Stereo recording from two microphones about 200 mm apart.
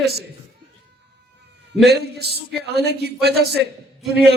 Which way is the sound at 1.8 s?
55° right (ahead or behind).